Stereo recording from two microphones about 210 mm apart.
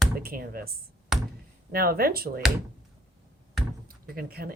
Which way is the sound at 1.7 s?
45° right (ahead or behind).